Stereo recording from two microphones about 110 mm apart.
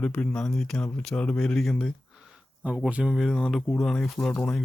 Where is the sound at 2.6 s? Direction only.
10° right (ahead or behind).